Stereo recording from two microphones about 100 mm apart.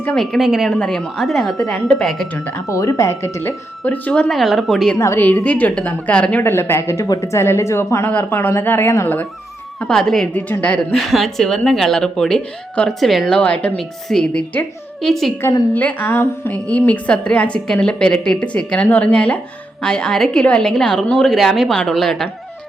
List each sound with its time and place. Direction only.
0.0 s a woman's voice: 10° left (ahead or behind)
2.6 s a woman's voice: 35° left (ahead or behind); by 4.9 s 5° left (ahead or behind)
4.9 s a woman's voice: 25° left (ahead or behind); by 6.4 s 10° left (ahead or behind)
6.4 s speech: 25° left (ahead or behind)
9.8 s a woman's voice: 5° left (ahead or behind)
10.3 s a woman's voice: 15° left (ahead or behind)
10.9 s a woman's voice: centre (ahead or behind)
15.7 s a woman's voice: 15° left (ahead or behind)